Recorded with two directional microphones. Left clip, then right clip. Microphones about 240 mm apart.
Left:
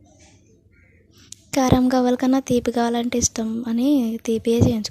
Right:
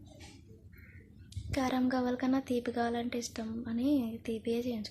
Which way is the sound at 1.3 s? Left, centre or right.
Left.